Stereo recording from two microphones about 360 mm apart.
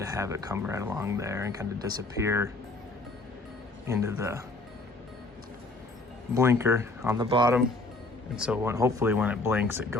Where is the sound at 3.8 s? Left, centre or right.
Centre.